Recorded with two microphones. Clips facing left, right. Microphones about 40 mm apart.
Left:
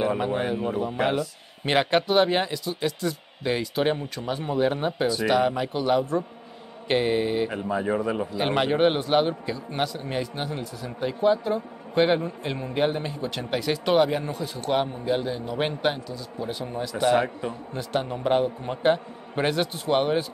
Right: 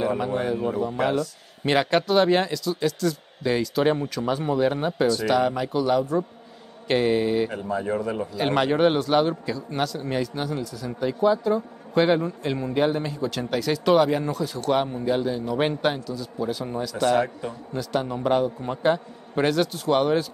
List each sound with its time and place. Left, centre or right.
0.0 s speech: left
10.3 s speech: left